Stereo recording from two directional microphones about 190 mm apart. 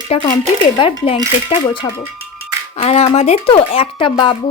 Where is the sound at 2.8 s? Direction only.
30° left (ahead or behind).